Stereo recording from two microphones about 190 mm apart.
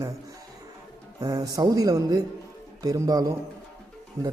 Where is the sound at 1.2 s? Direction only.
20° right (ahead or behind).